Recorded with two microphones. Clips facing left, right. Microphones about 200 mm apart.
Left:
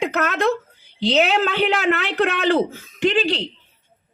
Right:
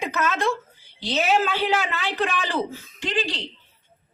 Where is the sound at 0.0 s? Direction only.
60° left (ahead or behind).